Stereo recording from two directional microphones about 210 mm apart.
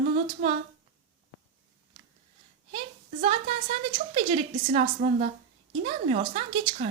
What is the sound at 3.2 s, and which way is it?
Speech, 35° right (ahead or behind).